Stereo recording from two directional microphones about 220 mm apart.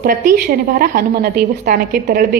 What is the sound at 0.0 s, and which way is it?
A woman's voice, 40° right (ahead or behind).